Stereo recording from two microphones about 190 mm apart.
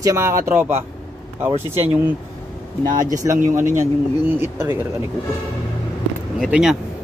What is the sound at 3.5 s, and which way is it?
Speech, 40° right (ahead or behind).